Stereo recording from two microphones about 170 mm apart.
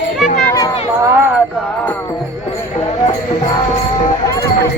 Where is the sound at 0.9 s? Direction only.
15° right (ahead or behind).